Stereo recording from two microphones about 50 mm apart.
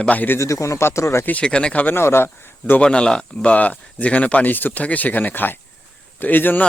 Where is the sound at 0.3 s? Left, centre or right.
Left.